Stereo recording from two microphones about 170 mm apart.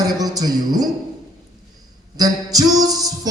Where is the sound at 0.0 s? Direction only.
20° right (ahead or behind).